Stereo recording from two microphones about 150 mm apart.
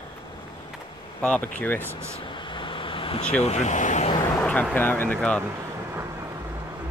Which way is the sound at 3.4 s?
50° left (ahead or behind).